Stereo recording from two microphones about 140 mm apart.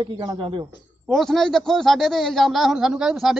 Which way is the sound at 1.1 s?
Centre (ahead or behind).